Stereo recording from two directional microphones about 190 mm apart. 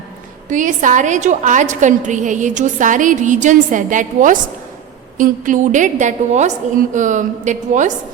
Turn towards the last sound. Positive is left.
turn(degrees=-40)  # may be behind; listen again after turning